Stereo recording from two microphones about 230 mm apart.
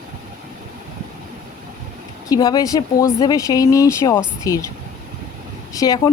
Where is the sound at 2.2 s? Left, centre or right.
Centre.